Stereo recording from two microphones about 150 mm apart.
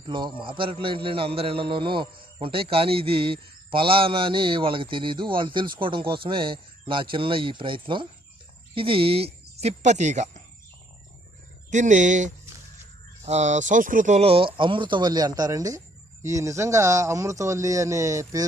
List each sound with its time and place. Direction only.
0.1 s a man's voice: 30° right (ahead or behind); by 10.2 s 50° right (ahead or behind)
11.7 s speech: 55° right (ahead or behind)
14.2 s a man's voice: 40° right (ahead or behind); by 18.4 s 20° right (ahead or behind)